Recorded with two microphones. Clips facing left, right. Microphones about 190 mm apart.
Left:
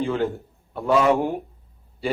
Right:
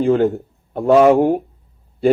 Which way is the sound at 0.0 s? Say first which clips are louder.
Right 9 dB; 50° right (ahead or behind).